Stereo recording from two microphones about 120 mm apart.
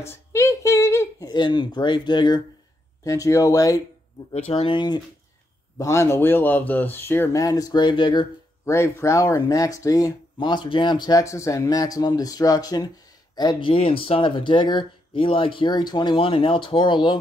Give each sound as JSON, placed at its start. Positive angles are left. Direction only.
{"t": 0.0, "sound": "a sound", "side_deg": 25}
{"t": 1.2, "sound": "speech", "side_deg": 40}
{"t": 3.0, "sound": "speech", "side_deg": 25}
{"t": 4.5, "sound": "speech", "side_deg": 55}
{"t": 4.7, "sound": "speech", "side_deg": 35}
{"t": 5.8, "sound": "speech", "side_deg": 25}
{"t": 8.6, "sound": "speech", "side_deg": 25}
{"t": 13.7, "sound": "speech", "side_deg": 50}